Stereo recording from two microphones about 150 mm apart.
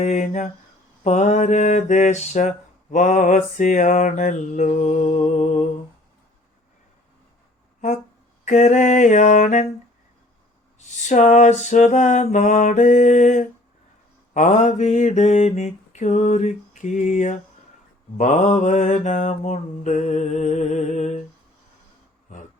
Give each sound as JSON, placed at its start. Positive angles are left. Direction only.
{"t": 0.0, "sound": "mantra", "side_deg": 55}
{"t": 8.4, "sound": "mantra", "side_deg": 50}
{"t": 10.8, "sound": "mantra", "side_deg": 50}
{"t": 22.3, "sound": "a sound", "side_deg": 55}